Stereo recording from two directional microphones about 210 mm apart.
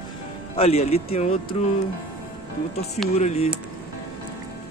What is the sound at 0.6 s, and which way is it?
Speech, 30° left (ahead or behind).